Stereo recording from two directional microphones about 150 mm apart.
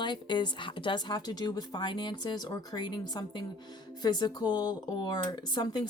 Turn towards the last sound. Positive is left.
turn(degrees=30)  # may be behind; listen again after turning